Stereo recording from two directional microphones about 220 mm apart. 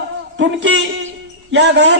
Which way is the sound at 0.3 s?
55° right (ahead or behind).